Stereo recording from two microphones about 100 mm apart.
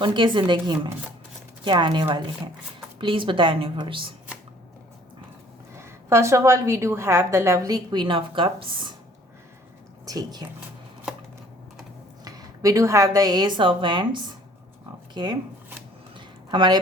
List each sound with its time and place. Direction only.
0.0 s a woman's voice: 50° right (ahead or behind)
5.7 s a woman's voice: 25° right (ahead or behind)
7.9 s a woman's voice: 50° right (ahead or behind)
10.1 s speech: 40° right (ahead or behind)
12.2 s a woman's voice: 35° right (ahead or behind)
16.1 s a sound: 50° right (ahead or behind)